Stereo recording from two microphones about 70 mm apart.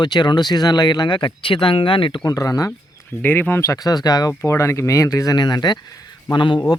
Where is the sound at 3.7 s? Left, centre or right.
Left.